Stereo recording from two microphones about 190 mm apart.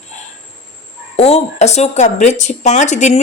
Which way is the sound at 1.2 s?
35° left (ahead or behind).